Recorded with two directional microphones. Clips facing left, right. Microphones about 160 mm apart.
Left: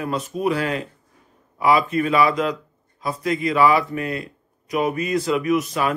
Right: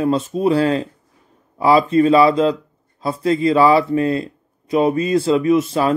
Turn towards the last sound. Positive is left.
turn(degrees=-30)  # may be behind; listen again after turning